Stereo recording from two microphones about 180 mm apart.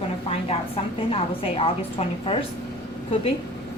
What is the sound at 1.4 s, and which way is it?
A woman's voice, 30° left (ahead or behind).